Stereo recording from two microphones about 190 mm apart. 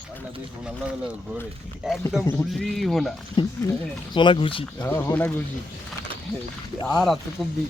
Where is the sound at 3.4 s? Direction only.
25° left (ahead or behind).